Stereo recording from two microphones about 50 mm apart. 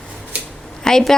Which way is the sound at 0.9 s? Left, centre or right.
Centre.